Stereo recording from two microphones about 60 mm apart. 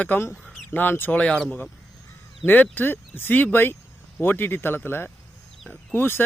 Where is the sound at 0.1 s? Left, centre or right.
Left.